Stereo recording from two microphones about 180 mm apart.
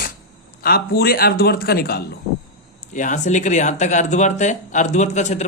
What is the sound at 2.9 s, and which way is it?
Speech, 45° left (ahead or behind).